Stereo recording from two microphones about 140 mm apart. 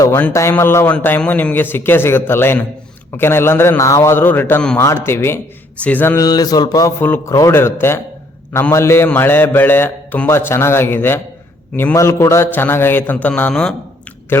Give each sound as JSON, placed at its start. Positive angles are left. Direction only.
{"t": 0.0, "sound": "a man's voice", "side_deg": 15}
{"t": 6.2, "sound": "mantra", "side_deg": 30}
{"t": 7.0, "sound": "a man's voice", "side_deg": 20}